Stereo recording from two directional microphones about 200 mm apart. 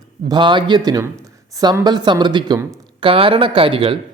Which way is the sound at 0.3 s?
25° right (ahead or behind).